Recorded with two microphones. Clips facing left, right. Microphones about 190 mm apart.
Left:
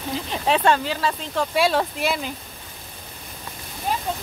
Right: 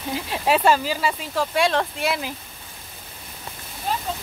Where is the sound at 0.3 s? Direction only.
5° right (ahead or behind).